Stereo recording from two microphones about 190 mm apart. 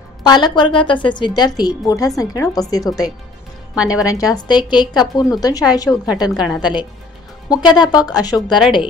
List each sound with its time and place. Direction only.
0.2 s a woman's voice: 20° left (ahead or behind)
8.5 s a woman's voice: centre (ahead or behind)